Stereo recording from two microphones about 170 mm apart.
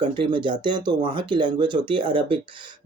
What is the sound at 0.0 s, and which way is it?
Speech, 30° right (ahead or behind).